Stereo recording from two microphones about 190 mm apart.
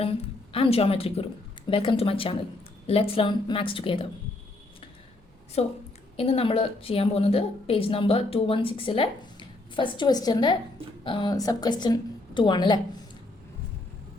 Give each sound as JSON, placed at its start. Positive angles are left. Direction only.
{"t": 0.5, "sound": "a woman's voice", "side_deg": 30}
{"t": 5.6, "sound": "a woman's voice", "side_deg": 35}